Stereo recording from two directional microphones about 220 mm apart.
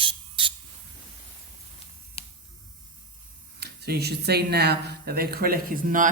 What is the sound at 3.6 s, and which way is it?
Speech, 45° right (ahead or behind).